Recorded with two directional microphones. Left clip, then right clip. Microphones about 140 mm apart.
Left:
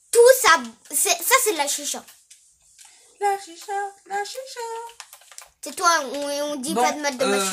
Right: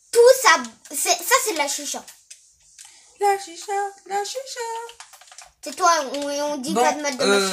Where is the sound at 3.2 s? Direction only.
25° right (ahead or behind).